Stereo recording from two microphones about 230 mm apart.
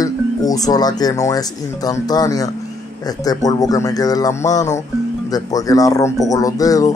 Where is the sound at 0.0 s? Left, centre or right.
Centre.